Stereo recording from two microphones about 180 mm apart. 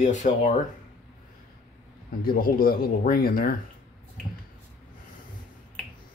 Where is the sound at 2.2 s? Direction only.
55° left (ahead or behind).